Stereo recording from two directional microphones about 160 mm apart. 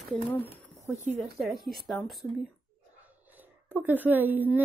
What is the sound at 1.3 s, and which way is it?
Speech, centre (ahead or behind).